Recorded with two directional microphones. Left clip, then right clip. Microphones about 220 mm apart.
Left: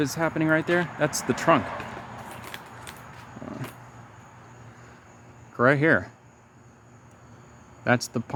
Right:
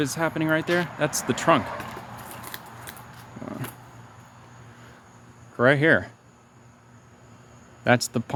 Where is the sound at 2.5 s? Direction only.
20° right (ahead or behind).